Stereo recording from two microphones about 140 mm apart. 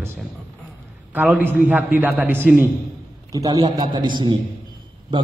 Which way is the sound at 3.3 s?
25° right (ahead or behind).